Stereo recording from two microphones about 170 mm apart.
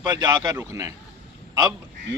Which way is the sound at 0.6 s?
15° right (ahead or behind).